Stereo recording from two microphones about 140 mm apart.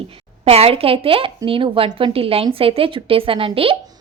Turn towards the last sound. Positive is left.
turn(degrees=-40)  # may be behind; listen again after turning